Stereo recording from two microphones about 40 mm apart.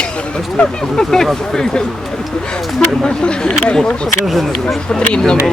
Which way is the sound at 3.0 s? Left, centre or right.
Left.